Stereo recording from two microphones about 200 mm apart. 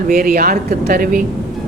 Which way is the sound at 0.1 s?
50° right (ahead or behind).